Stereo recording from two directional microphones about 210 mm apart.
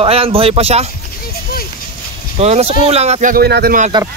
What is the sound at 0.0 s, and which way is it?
Speech, 25° right (ahead or behind).